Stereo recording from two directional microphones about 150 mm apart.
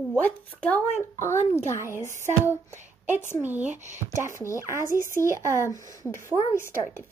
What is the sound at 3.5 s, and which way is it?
Speech, 10° right (ahead or behind).